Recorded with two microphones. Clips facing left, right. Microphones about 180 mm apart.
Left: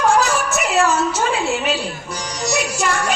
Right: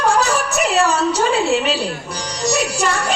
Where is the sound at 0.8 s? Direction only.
35° right (ahead or behind).